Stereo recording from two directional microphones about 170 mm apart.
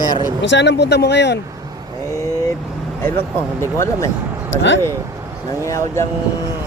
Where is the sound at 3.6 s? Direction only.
15° left (ahead or behind).